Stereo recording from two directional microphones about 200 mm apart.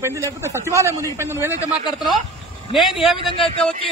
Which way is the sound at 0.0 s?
15° right (ahead or behind).